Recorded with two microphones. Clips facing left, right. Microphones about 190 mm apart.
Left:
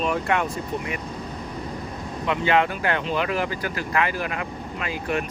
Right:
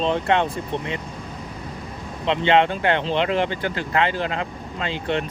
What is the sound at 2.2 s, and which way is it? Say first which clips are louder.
Speech: right 3 dB; 25° right (ahead or behind).